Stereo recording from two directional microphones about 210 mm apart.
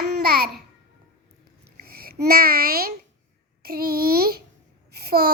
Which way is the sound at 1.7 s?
45° right (ahead or behind).